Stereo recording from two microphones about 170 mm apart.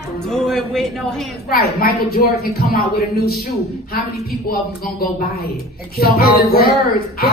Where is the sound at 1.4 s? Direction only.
65° left (ahead or behind).